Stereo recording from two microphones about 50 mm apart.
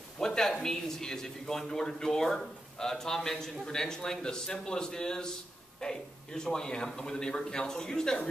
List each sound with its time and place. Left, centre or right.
0.2 s a man's voice: centre